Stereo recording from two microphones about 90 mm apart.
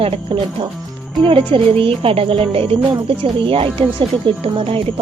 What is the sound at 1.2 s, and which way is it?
Speech, 80° right.